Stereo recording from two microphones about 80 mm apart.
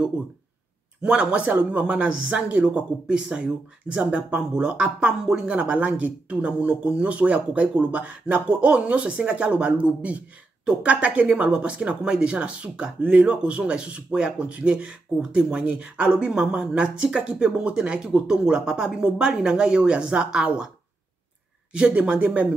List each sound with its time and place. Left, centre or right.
1.0 s speech: centre
21.7 s speech: centre